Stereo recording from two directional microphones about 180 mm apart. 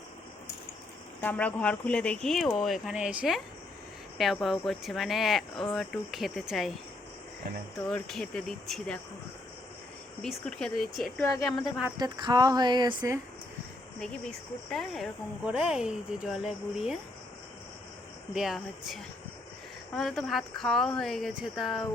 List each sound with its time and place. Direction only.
1.2 s speech: 10° left (ahead or behind)
7.9 s speech: 5° left (ahead or behind)
10.2 s speech: centre (ahead or behind)
11.9 s speech: 20° right (ahead or behind)
14.0 s speech: 5° left (ahead or behind)
18.3 s speech: centre (ahead or behind)